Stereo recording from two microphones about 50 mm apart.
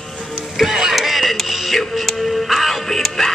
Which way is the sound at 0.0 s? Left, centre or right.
Centre.